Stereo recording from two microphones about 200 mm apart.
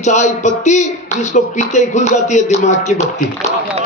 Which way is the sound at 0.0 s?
35° left (ahead or behind).